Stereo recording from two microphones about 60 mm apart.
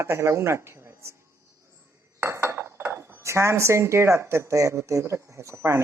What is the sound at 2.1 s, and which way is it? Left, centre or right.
Dishes, right.